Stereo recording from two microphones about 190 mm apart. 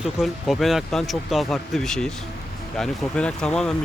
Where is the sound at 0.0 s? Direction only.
Centre (ahead or behind).